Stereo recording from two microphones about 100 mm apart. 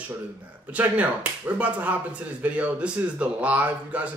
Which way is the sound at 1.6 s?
15° right (ahead or behind).